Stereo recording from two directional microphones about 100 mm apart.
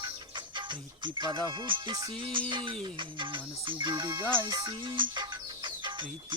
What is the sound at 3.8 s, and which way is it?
Music, 45° right (ahead or behind).